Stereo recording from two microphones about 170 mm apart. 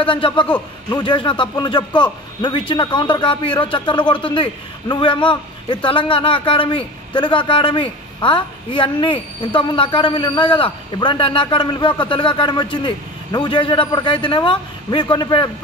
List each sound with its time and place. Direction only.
0.0 s a man's voice: 30° left (ahead or behind)